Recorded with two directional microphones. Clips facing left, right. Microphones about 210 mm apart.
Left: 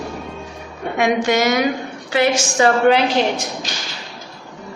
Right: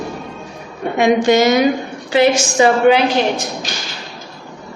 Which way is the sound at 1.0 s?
25° right (ahead or behind).